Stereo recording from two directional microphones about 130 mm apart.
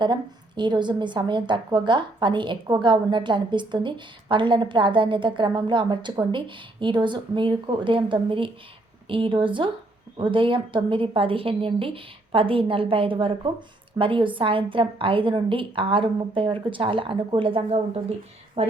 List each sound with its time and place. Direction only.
0.0 s a woman's voice: 35° right (ahead or behind); by 18.7 s 55° right (ahead or behind)